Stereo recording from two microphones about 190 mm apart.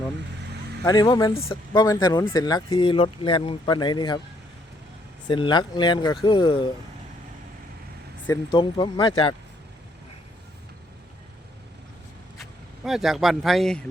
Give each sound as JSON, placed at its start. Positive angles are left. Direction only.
{"t": 0.9, "sound": "speech", "side_deg": 20}
{"t": 5.3, "sound": "speech", "side_deg": 25}
{"t": 8.3, "sound": "speech", "side_deg": 25}
{"t": 12.4, "sound": "speech", "side_deg": 0}